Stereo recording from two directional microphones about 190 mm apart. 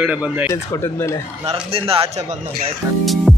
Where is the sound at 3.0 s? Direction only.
Centre (ahead or behind).